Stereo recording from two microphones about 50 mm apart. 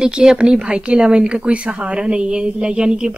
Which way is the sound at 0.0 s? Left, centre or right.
Centre.